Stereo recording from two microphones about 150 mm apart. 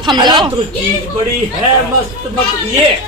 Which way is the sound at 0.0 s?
30° right (ahead or behind).